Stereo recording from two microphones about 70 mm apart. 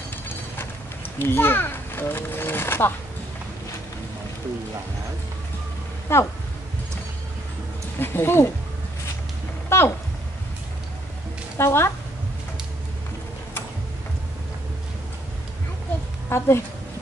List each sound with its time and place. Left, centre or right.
0.1 s a sound: left
6.1 s speech: left
8.0 s speech: left
9.7 s a sound: left
11.5 s speech: left
16.3 s a woman's voice: left